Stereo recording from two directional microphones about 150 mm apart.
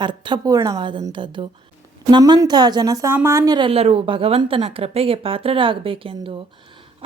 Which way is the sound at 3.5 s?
40° right (ahead or behind).